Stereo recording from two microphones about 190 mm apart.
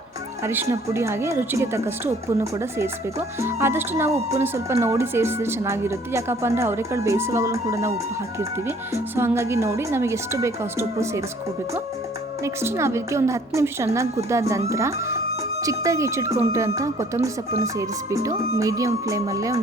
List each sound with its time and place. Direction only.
0.4 s a woman's voice: 10° right (ahead or behind)
12.4 s a woman's voice: 15° right (ahead or behind)